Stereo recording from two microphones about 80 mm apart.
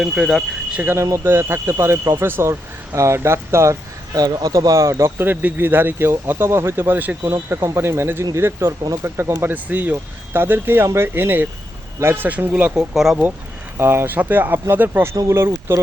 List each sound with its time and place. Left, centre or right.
0.0 s speech: centre
1.2 s speech: right
7.2 s speech: right
12.7 s speech: centre
13.7 s speech: right
15.1 s speech: right
15.4 s speech: right